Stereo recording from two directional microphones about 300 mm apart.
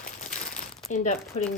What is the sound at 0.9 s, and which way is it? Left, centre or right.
Speech, left.